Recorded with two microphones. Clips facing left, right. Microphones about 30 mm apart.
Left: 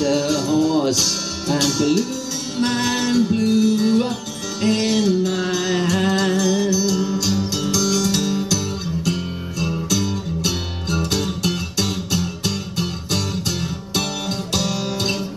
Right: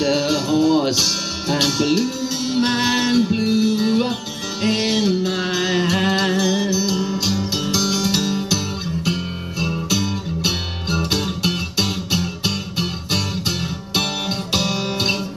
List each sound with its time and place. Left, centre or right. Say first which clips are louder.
0.0 s music: even; right
1.5 s speech: even; centre
2.5 s music: right 1 dB; right